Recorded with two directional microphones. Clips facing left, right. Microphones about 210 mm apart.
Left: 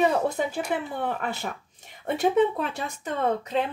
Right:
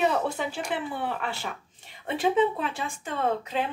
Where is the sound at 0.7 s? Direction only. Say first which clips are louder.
Left 2 dB; 45° left (ahead or behind).